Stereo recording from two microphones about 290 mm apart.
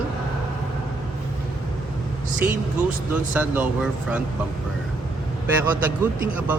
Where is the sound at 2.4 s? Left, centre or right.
Centre.